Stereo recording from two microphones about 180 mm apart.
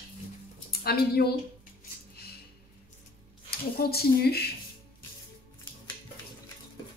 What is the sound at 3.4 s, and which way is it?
Speech, 60° left (ahead or behind).